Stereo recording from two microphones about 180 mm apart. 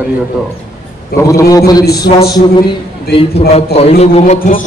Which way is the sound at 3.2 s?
35° left (ahead or behind).